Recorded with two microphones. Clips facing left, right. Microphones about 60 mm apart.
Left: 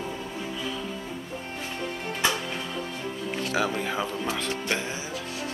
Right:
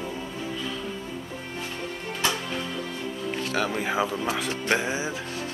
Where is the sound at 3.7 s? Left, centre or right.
Centre.